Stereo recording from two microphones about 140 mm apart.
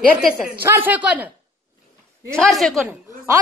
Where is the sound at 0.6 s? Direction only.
15° right (ahead or behind).